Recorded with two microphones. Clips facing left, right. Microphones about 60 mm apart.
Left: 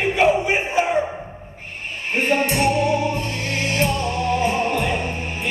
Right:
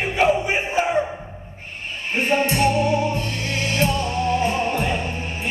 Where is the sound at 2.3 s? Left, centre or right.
Left.